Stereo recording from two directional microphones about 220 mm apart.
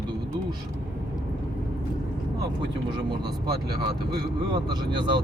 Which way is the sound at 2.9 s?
20° right (ahead or behind).